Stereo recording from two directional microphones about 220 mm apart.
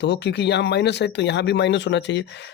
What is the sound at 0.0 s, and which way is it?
Speech, 50° left (ahead or behind).